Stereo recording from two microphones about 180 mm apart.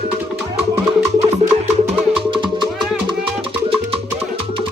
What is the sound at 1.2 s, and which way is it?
Music, 40° right (ahead or behind).